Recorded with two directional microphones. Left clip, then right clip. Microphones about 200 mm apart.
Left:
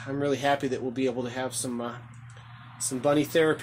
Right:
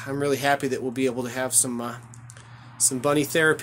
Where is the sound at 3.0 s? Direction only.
10° right (ahead or behind).